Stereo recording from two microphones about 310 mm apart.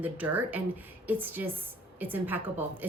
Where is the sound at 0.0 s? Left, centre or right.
Centre.